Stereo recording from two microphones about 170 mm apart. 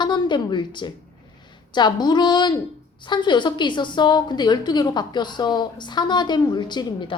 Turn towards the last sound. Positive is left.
turn(degrees=25)  # may be behind; listen again after turning